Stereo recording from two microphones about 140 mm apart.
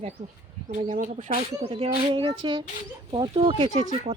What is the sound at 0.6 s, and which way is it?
Speech, 60° right (ahead or behind).